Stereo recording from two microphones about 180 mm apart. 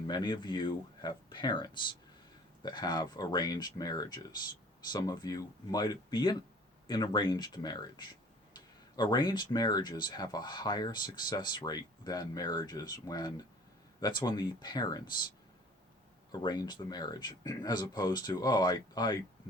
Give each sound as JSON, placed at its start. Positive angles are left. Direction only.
{"t": 0.1, "sound": "speech", "side_deg": 25}
{"t": 16.3, "sound": "speech", "side_deg": 25}